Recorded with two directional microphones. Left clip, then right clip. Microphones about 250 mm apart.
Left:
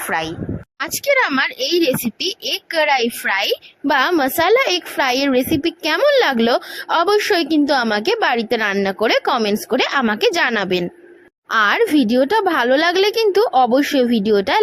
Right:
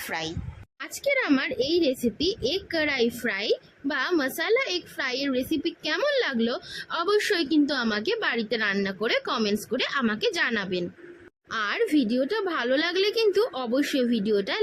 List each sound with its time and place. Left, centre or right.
0.1 s speech: centre
0.8 s a child's voice: left